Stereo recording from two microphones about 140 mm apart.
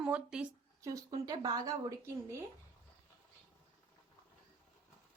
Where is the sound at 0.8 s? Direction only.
25° right (ahead or behind).